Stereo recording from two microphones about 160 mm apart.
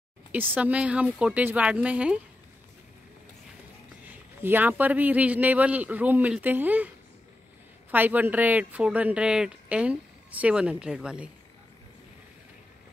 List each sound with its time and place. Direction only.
0.3 s speech: 10° right (ahead or behind)
4.1 s speech: 10° right (ahead or behind)
7.9 s speech: 10° right (ahead or behind)